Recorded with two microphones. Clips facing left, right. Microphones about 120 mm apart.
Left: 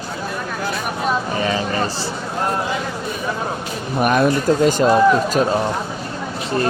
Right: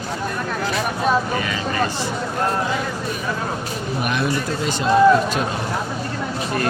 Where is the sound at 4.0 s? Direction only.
45° left (ahead or behind).